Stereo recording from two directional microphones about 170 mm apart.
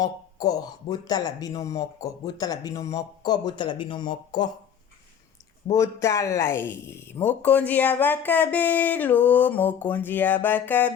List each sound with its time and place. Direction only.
0.0 s speech: 20° left (ahead or behind)
5.7 s speech: 15° left (ahead or behind)